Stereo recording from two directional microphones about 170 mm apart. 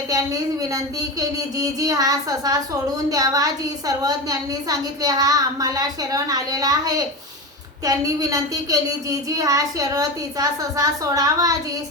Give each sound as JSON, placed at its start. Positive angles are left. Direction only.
{"t": 1.5, "sound": "a woman's voice", "side_deg": -20}